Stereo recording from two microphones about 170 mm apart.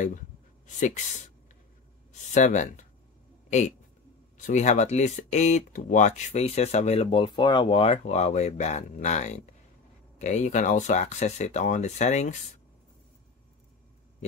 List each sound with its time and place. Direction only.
0.7 s speech: 45° left (ahead or behind)
2.3 s speech: 45° left (ahead or behind)